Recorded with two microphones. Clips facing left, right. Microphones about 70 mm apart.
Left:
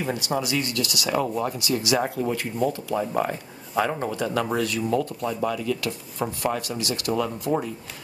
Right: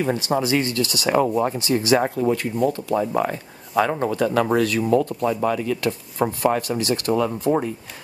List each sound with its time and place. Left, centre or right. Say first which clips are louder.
0.0 s speech: right 5 dB; right
5.3 s speech: right 2 dB; right
5.8 s speech: right 6 dB; right